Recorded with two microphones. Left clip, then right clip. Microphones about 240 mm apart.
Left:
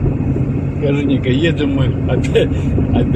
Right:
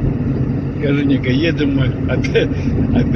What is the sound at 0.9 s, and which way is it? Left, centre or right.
Speech, centre.